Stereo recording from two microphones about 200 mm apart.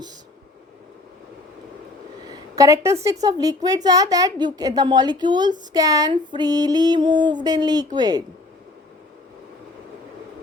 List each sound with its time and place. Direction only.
2.2 s a woman's voice: 20° right (ahead or behind)